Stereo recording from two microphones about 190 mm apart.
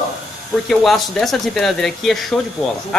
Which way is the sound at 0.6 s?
Centre (ahead or behind).